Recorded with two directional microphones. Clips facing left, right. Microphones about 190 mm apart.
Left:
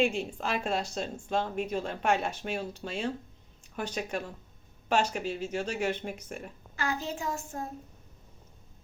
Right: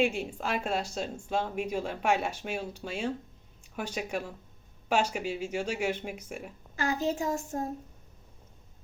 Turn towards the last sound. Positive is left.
turn(degrees=-40)  # may be behind; listen again after turning